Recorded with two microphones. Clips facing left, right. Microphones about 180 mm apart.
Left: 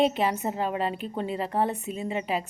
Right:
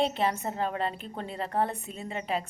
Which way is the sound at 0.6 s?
10° left (ahead or behind).